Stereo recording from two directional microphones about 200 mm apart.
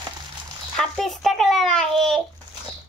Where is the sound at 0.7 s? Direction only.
Centre (ahead or behind).